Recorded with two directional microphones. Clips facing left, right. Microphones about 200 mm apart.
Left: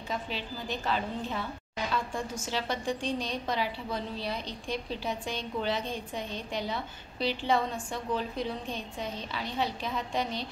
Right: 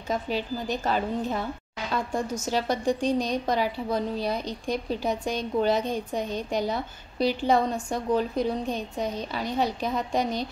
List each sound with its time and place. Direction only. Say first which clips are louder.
0.1 s a woman's voice: right 8 dB; 45° right (ahead or behind)